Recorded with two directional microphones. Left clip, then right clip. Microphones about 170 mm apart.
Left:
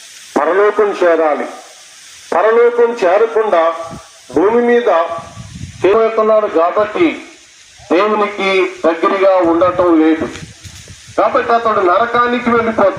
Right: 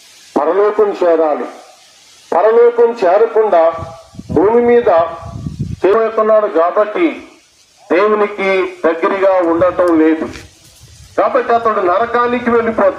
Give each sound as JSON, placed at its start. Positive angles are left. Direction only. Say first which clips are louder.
{"t": 0.3, "sound": "speech", "louder": "even", "side_deg": -10}
{"t": 2.3, "sound": "a man's voice", "louder": "right 1 dB", "side_deg": -25}
{"t": 6.0, "sound": "a man's voice", "louder": "even", "side_deg": 5}